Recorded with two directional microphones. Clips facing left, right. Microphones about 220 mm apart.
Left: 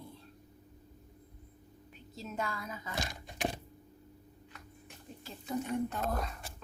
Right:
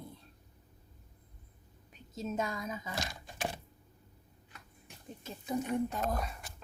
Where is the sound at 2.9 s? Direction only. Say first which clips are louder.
Left 1 dB; 20° left (ahead or behind).